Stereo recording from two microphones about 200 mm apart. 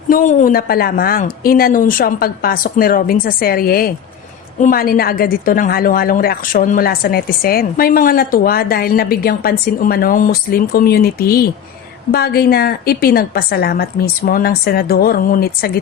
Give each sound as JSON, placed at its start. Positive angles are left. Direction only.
{"t": 0.1, "sound": "a woman's voice", "side_deg": 40}